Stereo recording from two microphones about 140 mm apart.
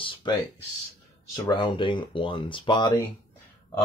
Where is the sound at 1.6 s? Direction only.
35° left (ahead or behind).